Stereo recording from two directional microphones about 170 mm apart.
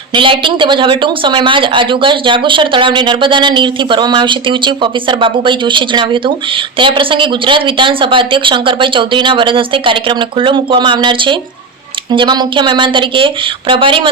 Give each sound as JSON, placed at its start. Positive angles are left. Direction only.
{"t": 0.1, "sound": "speech", "side_deg": -30}